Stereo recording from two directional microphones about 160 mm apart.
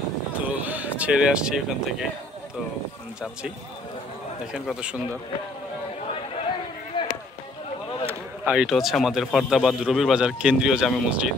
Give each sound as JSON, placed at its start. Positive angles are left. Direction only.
{"t": 0.5, "sound": "speech", "side_deg": -10}
{"t": 4.5, "sound": "a man's voice", "side_deg": -5}
{"t": 6.9, "sound": "run", "side_deg": 30}
{"t": 8.1, "sound": "a man's voice", "side_deg": -5}